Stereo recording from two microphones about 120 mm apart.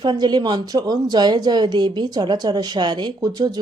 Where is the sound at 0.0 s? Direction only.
40° right (ahead or behind).